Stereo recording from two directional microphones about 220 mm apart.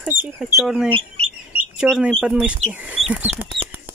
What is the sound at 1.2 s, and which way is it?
Bird, 30° right (ahead or behind).